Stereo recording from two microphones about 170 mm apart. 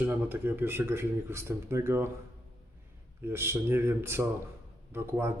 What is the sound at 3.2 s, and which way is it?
A man's voice, 15° right (ahead or behind).